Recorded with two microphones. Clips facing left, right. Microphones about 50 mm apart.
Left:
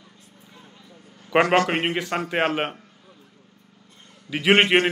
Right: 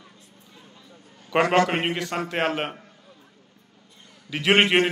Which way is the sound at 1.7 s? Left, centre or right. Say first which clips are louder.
Left 2 dB; centre.